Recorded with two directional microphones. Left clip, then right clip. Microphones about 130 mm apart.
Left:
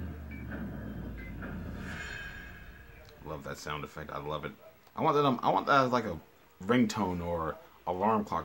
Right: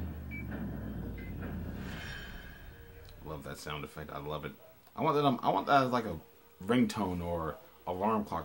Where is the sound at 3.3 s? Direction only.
20° left (ahead or behind).